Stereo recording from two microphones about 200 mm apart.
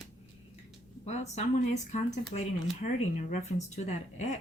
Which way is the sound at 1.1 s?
35° left (ahead or behind).